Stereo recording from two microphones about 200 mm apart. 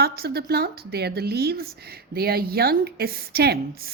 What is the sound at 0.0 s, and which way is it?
A woman's voice, 50° right (ahead or behind).